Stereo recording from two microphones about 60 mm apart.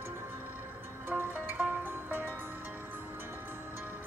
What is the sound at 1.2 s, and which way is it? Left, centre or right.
Music, right.